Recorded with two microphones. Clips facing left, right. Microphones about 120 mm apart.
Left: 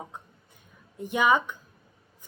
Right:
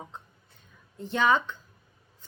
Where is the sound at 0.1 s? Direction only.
15° left (ahead or behind).